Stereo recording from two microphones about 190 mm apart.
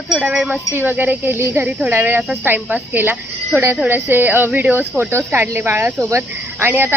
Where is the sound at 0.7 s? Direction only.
10° right (ahead or behind).